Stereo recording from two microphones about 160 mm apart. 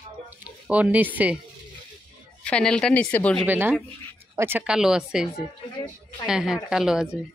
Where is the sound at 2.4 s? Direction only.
5° left (ahead or behind).